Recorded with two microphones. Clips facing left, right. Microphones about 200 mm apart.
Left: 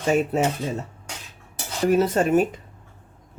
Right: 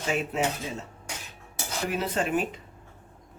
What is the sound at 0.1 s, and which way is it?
Speech, 45° left (ahead or behind).